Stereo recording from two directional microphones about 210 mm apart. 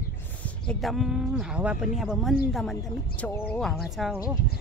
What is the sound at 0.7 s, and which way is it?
Speech, centre (ahead or behind).